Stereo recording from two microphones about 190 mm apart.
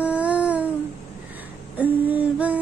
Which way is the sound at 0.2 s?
5° right (ahead or behind).